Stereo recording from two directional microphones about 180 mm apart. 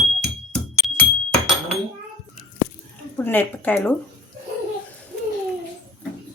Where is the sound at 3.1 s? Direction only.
10° left (ahead or behind).